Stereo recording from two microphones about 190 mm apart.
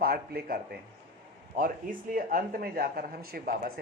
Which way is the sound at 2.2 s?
50° right (ahead or behind).